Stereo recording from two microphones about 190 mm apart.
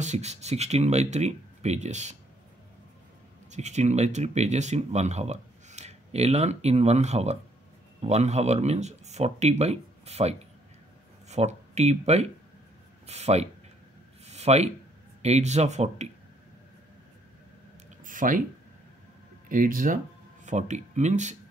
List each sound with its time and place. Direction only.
0.0 s speech: 35° right (ahead or behind)
3.5 s speech: 35° right (ahead or behind)
14.2 s a sound: 35° right (ahead or behind)
15.2 s speech: 35° right (ahead or behind)
18.0 s a sound: 45° right (ahead or behind)
19.5 s speech: 45° right (ahead or behind)